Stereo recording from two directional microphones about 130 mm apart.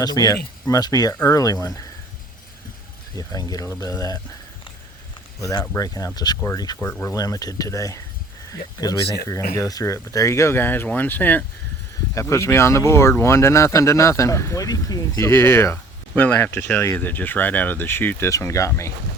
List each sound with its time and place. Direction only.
0.0 s speech: 30° left (ahead or behind)
3.2 s speech: 30° left (ahead or behind)
5.4 s speech: 25° left (ahead or behind)
6.7 s speech: 15° left (ahead or behind)
7.1 s speech: 25° left (ahead or behind)